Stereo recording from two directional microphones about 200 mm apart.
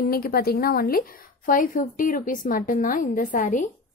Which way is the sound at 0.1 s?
50° left (ahead or behind).